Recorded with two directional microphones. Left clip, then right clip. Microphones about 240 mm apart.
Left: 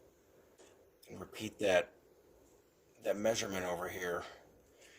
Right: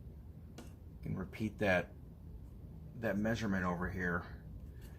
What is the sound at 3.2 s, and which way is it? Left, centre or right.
Speech, left.